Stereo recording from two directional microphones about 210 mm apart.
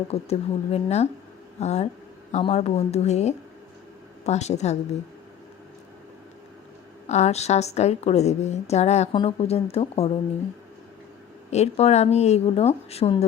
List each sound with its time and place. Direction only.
0.1 s a woman's voice: 30° left (ahead or behind)
7.1 s a woman's voice: 30° left (ahead or behind)
11.5 s a woman's voice: 30° left (ahead or behind)